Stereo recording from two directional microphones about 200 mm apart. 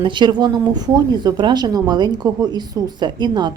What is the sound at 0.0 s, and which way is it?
Speech, 25° right (ahead or behind).